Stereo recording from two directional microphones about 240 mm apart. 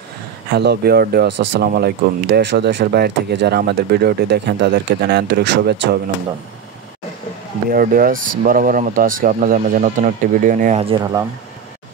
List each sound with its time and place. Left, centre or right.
0.5 s speech: right
7.7 s speech: right; by 11.2 s centre